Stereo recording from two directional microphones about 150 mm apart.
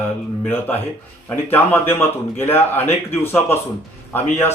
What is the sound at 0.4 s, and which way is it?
A man's voice, 15° left (ahead or behind).